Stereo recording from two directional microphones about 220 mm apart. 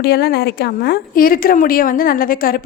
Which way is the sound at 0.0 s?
45° left (ahead or behind).